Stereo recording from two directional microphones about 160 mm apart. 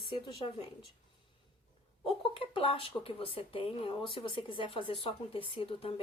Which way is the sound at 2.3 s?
35° left (ahead or behind).